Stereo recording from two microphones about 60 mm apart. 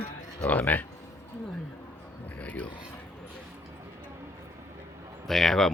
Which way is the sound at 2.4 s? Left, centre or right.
Left.